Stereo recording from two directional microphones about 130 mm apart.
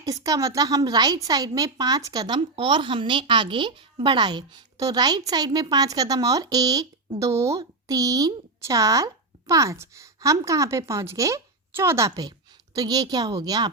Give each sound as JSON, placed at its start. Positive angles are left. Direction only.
{"t": 0.0, "sound": "a woman's voice", "side_deg": -25}